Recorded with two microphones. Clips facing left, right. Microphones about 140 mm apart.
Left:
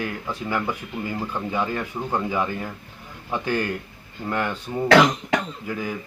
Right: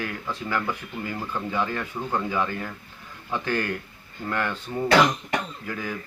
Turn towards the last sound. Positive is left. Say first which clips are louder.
# left 3 dB
turn(degrees=15)  # may be behind; listen again after turning